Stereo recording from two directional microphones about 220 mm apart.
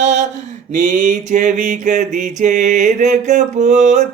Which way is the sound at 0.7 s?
35° right (ahead or behind).